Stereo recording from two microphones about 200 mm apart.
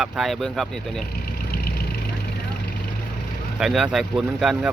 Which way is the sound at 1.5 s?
50° left (ahead or behind).